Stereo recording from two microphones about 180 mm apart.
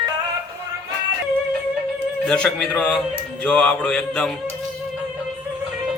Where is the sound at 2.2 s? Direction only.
5° left (ahead or behind).